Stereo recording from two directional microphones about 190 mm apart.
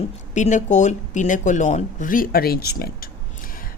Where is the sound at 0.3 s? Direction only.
40° left (ahead or behind).